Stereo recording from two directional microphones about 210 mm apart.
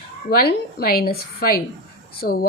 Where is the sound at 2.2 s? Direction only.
45° left (ahead or behind).